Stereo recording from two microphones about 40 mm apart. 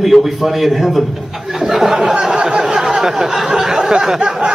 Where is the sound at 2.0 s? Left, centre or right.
Centre.